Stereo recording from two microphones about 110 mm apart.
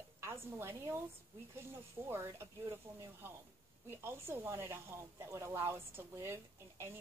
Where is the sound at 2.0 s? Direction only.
20° right (ahead or behind).